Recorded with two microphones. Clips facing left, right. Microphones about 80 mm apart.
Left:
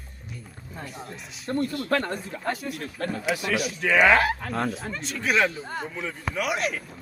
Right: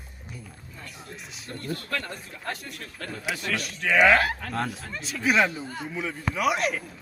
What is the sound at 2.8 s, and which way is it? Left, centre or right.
Speech, left.